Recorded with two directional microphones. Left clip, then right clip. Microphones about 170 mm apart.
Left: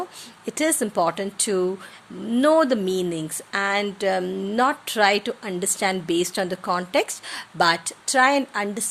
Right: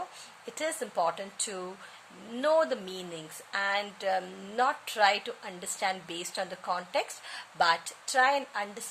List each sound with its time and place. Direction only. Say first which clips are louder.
0.4 s speech: left 11 dB; 35° left (ahead or behind)